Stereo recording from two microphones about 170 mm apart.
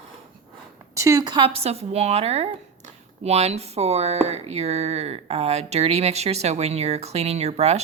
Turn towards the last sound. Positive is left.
turn(degrees=-40)  # may be behind; listen again after turning